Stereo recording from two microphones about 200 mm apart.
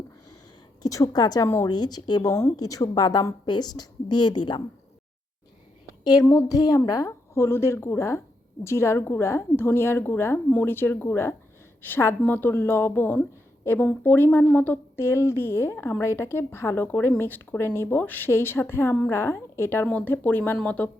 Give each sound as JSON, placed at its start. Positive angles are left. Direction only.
{"t": 0.8, "sound": "a woman's voice", "side_deg": 15}
{"t": 6.1, "sound": "a woman's voice", "side_deg": 15}